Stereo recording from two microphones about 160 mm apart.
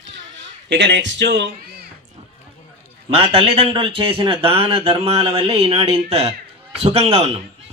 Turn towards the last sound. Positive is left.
turn(degrees=-40)  # may be behind; listen again after turning